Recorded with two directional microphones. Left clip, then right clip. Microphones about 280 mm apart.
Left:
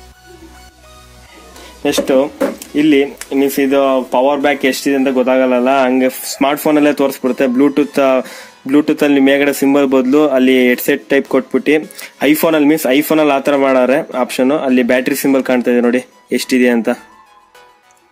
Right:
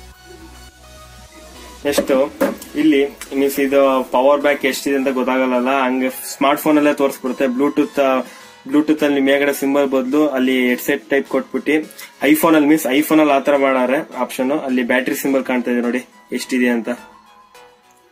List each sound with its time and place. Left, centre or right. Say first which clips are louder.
1.8 s a man's voice: left 3 dB; left